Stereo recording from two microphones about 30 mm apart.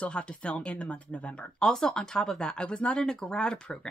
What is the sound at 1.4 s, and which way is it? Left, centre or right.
Speech, left.